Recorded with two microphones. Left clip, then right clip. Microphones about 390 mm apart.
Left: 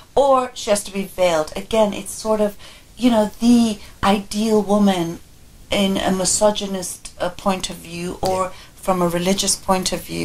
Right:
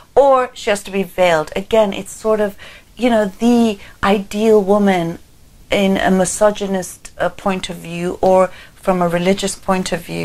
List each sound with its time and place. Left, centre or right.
0.1 s speech: right